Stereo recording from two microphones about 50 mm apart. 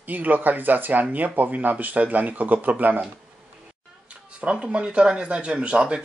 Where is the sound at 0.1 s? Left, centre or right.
Right.